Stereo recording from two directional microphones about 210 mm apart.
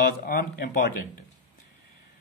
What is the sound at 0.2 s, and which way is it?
Speech, 45° left (ahead or behind).